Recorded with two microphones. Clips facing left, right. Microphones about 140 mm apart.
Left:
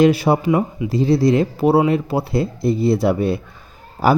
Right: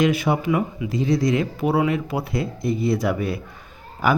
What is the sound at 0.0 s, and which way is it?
Speech, 35° left (ahead or behind).